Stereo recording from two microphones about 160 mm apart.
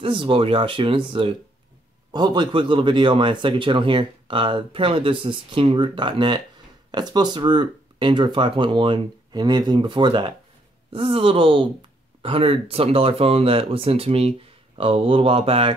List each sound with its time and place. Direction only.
0.0 s speech: 35° right (ahead or behind)